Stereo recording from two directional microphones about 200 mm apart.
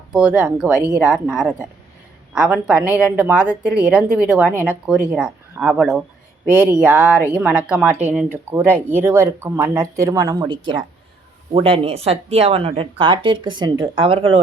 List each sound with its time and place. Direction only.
0.1 s speech: 5° right (ahead or behind); by 14.3 s 25° right (ahead or behind)